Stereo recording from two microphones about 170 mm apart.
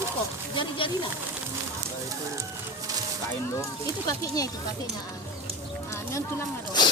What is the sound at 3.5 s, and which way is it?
A man's voice, 20° left (ahead or behind).